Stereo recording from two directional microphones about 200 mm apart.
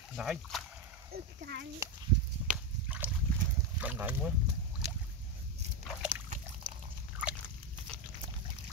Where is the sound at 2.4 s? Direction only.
10° right (ahead or behind).